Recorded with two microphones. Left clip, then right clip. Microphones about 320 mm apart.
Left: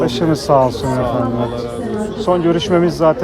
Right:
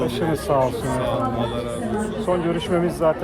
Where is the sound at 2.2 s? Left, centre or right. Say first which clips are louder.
Left 9 dB; left.